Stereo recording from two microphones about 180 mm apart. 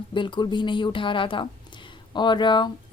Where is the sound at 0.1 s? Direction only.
25° left (ahead or behind).